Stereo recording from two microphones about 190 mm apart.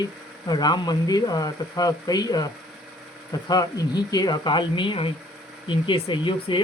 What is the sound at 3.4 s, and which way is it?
Speech, 20° left (ahead or behind).